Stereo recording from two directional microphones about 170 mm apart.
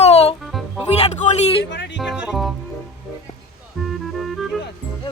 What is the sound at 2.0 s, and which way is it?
Speech, 5° right (ahead or behind).